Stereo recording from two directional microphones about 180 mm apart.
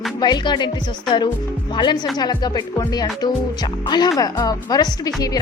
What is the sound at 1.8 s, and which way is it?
Speech, 25° left (ahead or behind).